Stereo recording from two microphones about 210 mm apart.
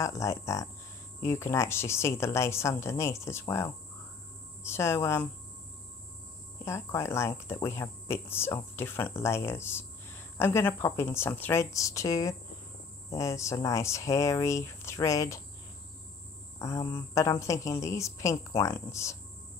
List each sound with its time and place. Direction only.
0.0 s speech: 15° left (ahead or behind)
6.6 s speech: 10° left (ahead or behind)
16.5 s speech: 15° left (ahead or behind)